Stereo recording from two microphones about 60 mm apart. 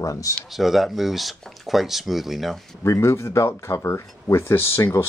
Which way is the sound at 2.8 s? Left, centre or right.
Left.